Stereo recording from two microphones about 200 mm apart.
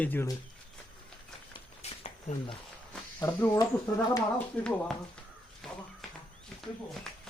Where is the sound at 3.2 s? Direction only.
15° left (ahead or behind).